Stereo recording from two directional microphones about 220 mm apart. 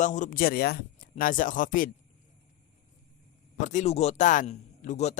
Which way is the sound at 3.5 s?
35° left (ahead or behind).